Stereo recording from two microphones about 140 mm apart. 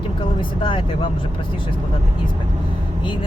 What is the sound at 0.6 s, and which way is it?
Speech, 35° left (ahead or behind).